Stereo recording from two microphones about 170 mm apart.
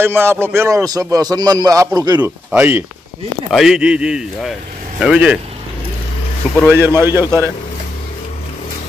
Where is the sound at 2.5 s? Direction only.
10° right (ahead or behind).